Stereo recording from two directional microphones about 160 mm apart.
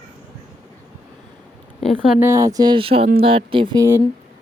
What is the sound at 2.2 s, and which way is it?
Speech, 20° right (ahead or behind).